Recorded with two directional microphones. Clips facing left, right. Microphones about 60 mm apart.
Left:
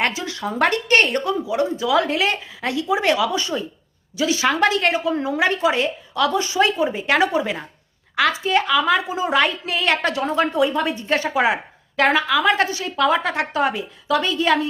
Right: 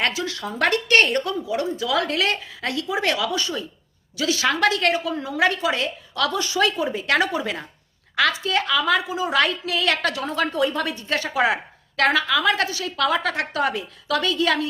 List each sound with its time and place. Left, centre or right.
0.0 s speech: left
10.8 s speech: left